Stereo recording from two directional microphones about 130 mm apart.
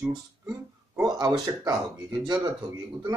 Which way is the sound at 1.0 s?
30° right (ahead or behind).